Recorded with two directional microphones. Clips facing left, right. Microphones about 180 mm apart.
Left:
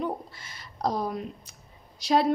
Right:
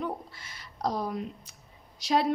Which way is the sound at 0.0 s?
30° left (ahead or behind).